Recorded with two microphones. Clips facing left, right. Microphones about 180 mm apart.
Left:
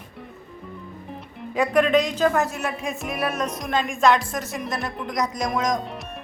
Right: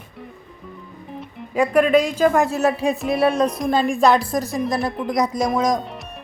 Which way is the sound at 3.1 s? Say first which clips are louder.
Right 8 dB; 30° right (ahead or behind).